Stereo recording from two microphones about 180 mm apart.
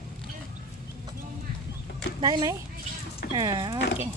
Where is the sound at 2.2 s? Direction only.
25° right (ahead or behind).